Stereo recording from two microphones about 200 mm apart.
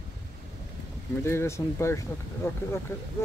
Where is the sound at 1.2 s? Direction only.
15° left (ahead or behind).